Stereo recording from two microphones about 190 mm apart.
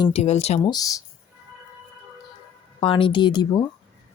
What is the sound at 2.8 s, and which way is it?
Speech, 25° left (ahead or behind).